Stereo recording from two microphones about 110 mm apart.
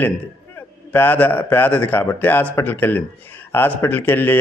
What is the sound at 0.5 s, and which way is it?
A man's voice, 20° left (ahead or behind).